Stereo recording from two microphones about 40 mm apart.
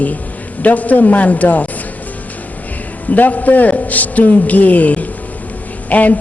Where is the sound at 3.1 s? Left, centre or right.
Left.